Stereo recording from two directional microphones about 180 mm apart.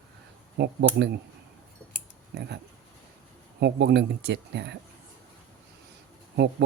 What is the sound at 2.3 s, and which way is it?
Speech, 65° right (ahead or behind).